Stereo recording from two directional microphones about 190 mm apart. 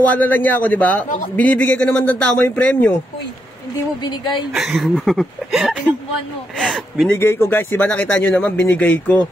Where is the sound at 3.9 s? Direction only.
25° left (ahead or behind).